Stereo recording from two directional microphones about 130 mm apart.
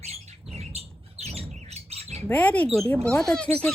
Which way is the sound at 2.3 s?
10° left (ahead or behind).